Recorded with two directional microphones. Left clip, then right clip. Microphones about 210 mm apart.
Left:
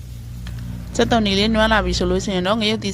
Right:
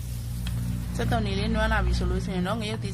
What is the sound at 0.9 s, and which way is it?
Speech, 40° left (ahead or behind).